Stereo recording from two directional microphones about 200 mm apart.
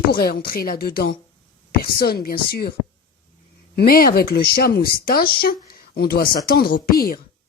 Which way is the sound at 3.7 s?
50° left (ahead or behind).